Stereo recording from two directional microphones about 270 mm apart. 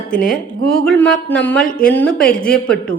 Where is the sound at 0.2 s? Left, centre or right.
Left.